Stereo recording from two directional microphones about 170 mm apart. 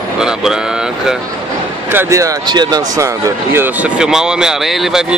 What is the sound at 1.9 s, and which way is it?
Speech, 15° right (ahead or behind).